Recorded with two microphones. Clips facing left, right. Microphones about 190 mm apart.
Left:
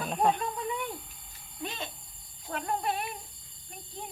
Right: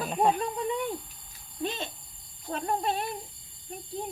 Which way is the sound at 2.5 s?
30° right (ahead or behind).